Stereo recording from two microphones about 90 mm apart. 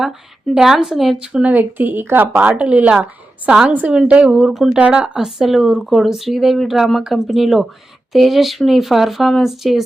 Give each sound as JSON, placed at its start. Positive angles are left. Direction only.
{"t": 0.0, "sound": "a woman's voice", "side_deg": -5}